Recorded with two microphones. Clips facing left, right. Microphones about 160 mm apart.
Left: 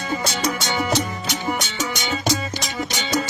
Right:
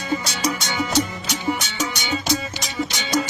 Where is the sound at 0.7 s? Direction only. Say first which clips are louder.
Left 3 dB; 50° left (ahead or behind).